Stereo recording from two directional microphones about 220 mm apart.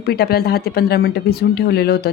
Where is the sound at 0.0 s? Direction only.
45° left (ahead or behind).